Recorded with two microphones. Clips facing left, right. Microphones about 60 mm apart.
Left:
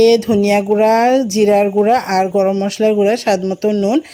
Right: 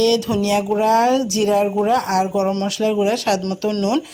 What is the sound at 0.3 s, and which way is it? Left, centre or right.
Speech, left.